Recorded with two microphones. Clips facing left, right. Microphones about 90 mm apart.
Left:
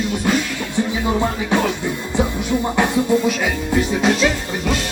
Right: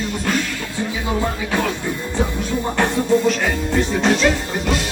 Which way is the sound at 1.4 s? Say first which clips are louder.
Left 4 dB; 20° left (ahead or behind).